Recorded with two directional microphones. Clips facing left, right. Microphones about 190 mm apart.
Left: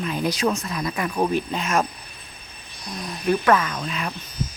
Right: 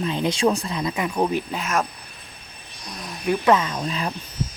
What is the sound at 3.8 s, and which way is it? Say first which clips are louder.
Speech: right 2 dB; 30° right (ahead or behind).